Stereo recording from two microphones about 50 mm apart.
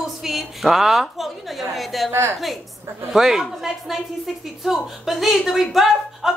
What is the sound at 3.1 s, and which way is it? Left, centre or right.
Speech, centre.